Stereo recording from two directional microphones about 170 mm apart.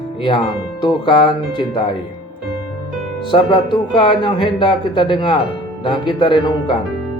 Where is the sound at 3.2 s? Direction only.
30° left (ahead or behind).